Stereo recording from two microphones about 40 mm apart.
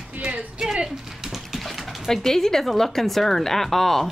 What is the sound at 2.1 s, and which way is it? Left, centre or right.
A woman's voice, centre.